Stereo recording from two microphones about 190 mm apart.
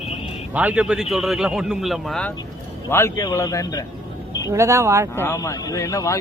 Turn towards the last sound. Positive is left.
turn(degrees=15)  # may be behind; listen again after turning